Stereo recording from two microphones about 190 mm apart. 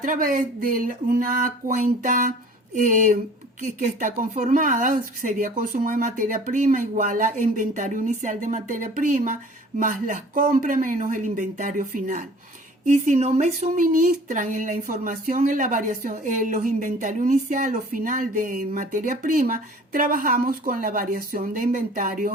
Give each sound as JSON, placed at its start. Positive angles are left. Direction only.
{"t": 0.0, "sound": "speech", "side_deg": -45}